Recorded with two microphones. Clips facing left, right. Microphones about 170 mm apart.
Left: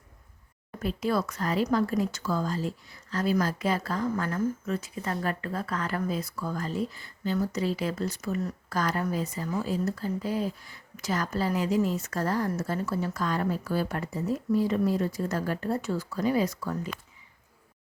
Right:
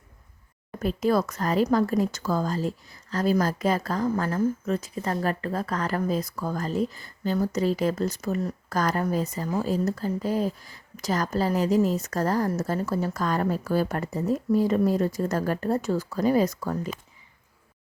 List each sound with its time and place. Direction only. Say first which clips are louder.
0.8 s speech: right 4 dB; 45° right (ahead or behind)